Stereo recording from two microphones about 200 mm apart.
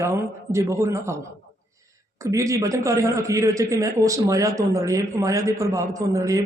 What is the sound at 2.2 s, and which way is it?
A man's voice, 15° right (ahead or behind).